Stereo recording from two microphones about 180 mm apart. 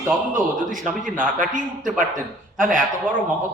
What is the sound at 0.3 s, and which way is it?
A man's voice, 45° right (ahead or behind).